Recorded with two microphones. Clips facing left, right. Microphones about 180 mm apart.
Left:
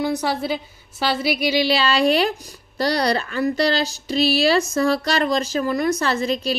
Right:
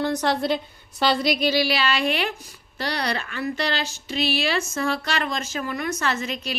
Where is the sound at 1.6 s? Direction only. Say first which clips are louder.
Left 4 dB; 30° left (ahead or behind).